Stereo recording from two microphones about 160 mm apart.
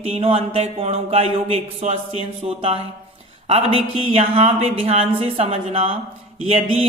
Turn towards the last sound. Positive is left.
turn(degrees=-35)  # may be behind; listen again after turning